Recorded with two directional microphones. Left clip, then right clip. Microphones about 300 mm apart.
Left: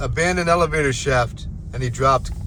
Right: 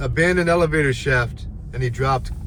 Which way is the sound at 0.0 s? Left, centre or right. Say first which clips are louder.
Right 2 dB; centre.